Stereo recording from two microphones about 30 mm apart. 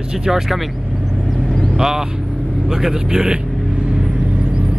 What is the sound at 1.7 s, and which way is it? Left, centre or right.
Speech, centre.